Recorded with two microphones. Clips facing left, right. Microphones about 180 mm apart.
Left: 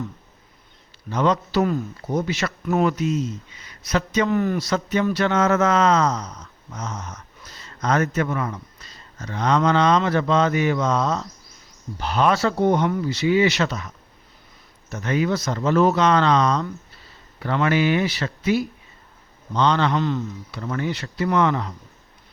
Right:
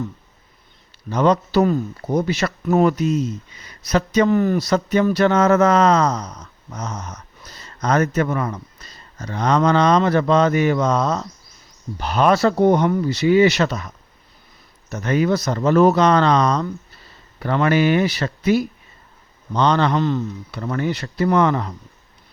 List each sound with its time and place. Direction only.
1.1 s a man's voice: 40° right (ahead or behind)
11.9 s a man's voice: 50° right (ahead or behind)